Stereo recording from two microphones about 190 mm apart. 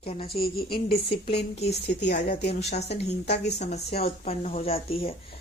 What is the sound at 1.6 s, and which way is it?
Speech, 60° left (ahead or behind).